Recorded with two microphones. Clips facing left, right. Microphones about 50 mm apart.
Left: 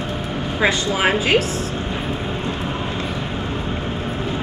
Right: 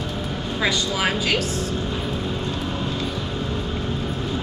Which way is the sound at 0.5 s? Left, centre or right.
Left.